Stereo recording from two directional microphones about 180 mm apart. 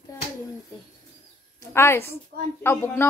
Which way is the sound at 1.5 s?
15° left (ahead or behind).